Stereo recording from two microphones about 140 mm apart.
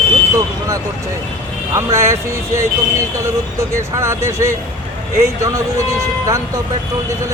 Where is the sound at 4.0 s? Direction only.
20° right (ahead or behind).